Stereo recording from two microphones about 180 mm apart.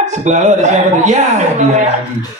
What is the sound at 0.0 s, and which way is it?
A man's voice, 40° right (ahead or behind).